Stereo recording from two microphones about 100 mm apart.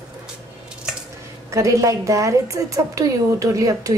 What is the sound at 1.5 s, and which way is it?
A woman's voice, 30° right (ahead or behind).